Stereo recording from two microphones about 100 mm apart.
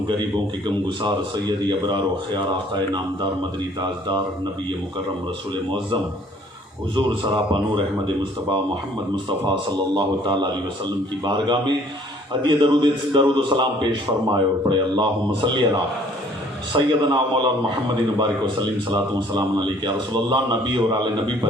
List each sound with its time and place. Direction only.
0.9 s a man's voice: 50° right (ahead or behind)
6.9 s a man's voice: 50° right (ahead or behind)
9.1 s a man's voice: 50° right (ahead or behind)